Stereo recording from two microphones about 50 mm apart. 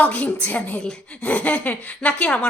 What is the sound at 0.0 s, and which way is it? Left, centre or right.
Speech, left.